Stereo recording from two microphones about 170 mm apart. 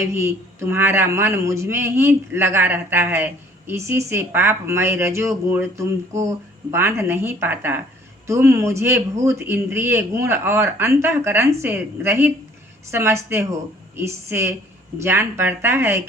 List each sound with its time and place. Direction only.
0.0 s speech: 15° right (ahead or behind)